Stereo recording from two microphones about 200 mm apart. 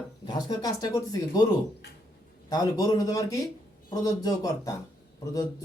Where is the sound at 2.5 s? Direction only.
20° left (ahead or behind).